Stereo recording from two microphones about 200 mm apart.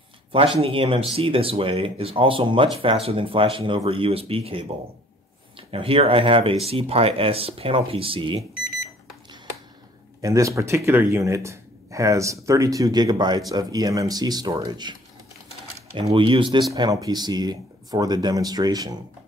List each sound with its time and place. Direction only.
0.6 s speech: 25° right (ahead or behind)
5.7 s speech: 30° right (ahead or behind)
10.2 s speech: 15° right (ahead or behind)